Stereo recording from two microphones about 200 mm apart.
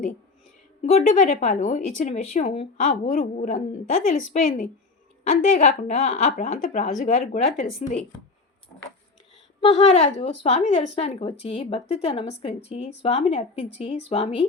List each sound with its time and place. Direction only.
0.8 s speech: 35° left (ahead or behind)
9.6 s speech: 30° left (ahead or behind)